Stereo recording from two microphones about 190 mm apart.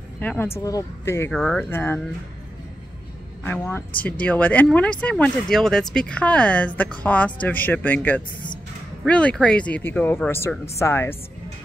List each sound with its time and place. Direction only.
0.2 s speech: 10° left (ahead or behind)
1.3 s speech: 5° left (ahead or behind)
3.4 s speech: 10° left (ahead or behind)